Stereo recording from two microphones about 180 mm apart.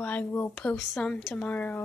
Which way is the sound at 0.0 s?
10° left (ahead or behind).